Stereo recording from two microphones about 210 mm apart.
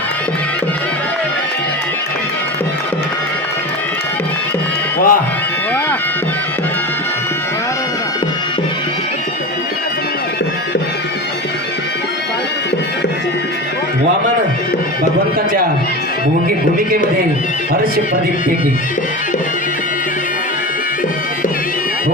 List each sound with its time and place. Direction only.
4.9 s music: 40° left (ahead or behind)